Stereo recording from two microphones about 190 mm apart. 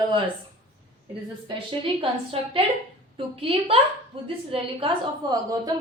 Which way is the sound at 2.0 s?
30° right (ahead or behind).